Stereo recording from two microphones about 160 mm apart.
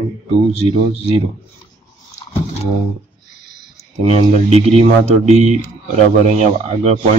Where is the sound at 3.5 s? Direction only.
25° right (ahead or behind).